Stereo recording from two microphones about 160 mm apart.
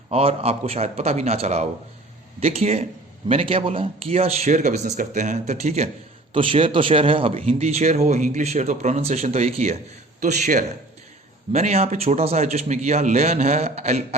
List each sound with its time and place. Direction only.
0.1 s a man's voice: 40° right (ahead or behind)